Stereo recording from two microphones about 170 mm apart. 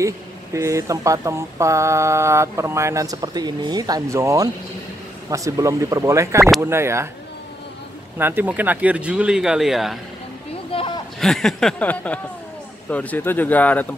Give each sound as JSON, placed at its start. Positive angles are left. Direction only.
{"t": 0.0, "sound": "speech", "side_deg": -15}
{"t": 8.2, "sound": "speech", "side_deg": -10}
{"t": 10.7, "sound": "a sound", "side_deg": 35}
{"t": 11.1, "sound": "speech", "side_deg": 0}